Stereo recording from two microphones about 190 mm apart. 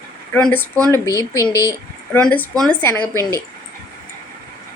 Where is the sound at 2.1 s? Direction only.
10° left (ahead or behind).